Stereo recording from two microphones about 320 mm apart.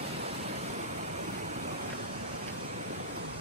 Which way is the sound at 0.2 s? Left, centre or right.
Right.